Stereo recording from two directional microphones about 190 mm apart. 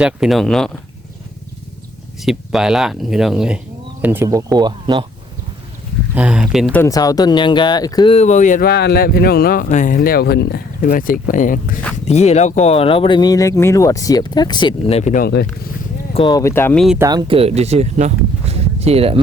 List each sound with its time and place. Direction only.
0.0 s speech: centre (ahead or behind)
2.2 s speech: centre (ahead or behind); by 5.0 s 25° right (ahead or behind)
6.1 s speech: 5° right (ahead or behind)
6.7 s speech: 15° left (ahead or behind)
8.1 s speech: 35° left (ahead or behind)
8.7 s speech: 60° left (ahead or behind)
16.1 s speech: 20° left (ahead or behind)
17.0 s speech: 20° right (ahead or behind)